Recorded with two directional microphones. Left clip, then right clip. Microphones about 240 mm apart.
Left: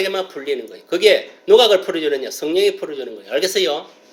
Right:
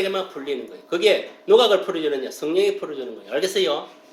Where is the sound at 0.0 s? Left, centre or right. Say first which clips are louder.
Left 3 dB; centre.